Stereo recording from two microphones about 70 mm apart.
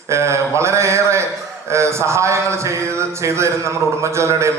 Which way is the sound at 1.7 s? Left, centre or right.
Right.